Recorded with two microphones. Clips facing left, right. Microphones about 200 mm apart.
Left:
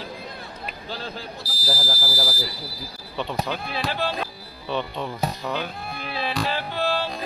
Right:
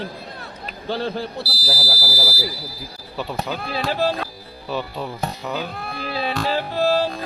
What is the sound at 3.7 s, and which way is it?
Speech, 35° right (ahead or behind).